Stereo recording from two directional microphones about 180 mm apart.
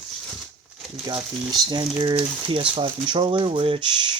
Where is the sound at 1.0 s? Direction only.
25° right (ahead or behind).